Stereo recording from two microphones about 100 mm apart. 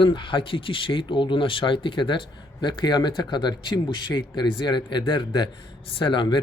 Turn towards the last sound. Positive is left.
turn(degrees=55)  # may be behind; listen again after turning